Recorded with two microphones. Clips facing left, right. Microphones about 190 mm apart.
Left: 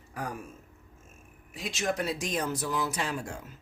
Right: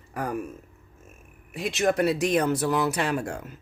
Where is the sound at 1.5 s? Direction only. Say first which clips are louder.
Right 7 dB; 60° right (ahead or behind).